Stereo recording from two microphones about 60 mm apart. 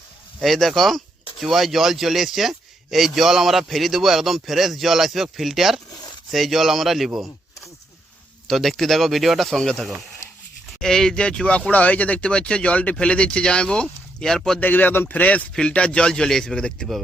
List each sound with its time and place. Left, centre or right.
0.4 s speech: centre
8.4 s speech: centre
14.6 s speech: left; by 16.7 s centre